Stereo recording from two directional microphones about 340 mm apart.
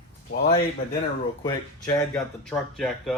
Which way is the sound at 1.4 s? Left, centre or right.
Centre.